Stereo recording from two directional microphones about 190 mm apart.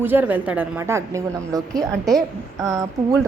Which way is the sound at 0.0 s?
10° right (ahead or behind).